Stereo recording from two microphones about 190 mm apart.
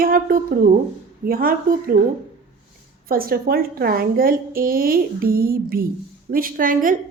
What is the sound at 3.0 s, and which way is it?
A woman's voice, 50° right (ahead or behind).